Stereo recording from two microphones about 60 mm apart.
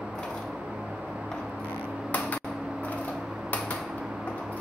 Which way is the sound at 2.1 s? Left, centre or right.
Left.